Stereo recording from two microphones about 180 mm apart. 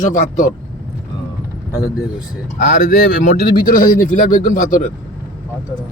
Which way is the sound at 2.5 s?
45° left (ahead or behind).